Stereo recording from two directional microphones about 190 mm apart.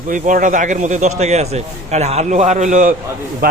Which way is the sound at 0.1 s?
45° right (ahead or behind).